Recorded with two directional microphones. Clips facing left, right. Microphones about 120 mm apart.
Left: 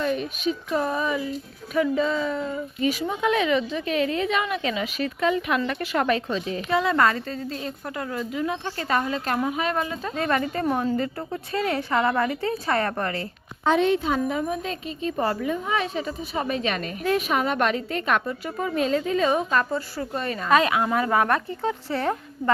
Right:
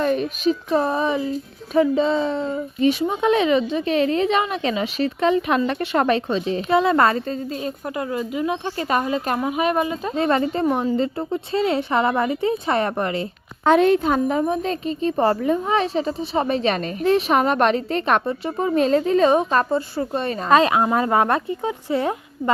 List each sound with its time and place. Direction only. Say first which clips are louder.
0.0 s a woman's voice: right 5 dB; 40° right (ahead or behind); by 13.2 s 20° right (ahead or behind)
13.7 s a woman's voice: right 5 dB; 50° right (ahead or behind); by 21.4 s 25° right (ahead or behind)
21.6 s speech: right 3 dB; 15° right (ahead or behind)